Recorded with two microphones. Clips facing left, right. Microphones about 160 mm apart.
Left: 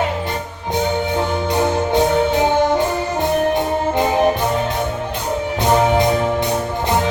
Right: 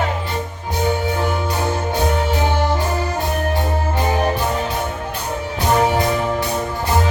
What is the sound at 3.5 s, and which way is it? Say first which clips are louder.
Music: left 4 dB; 20° left (ahead or behind).